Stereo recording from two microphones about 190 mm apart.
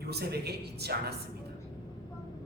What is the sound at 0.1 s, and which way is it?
Speech, 55° right (ahead or behind).